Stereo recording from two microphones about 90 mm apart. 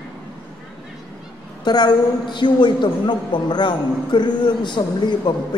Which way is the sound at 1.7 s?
55° left (ahead or behind).